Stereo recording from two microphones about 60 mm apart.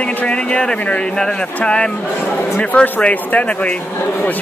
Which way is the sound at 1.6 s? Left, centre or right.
Centre.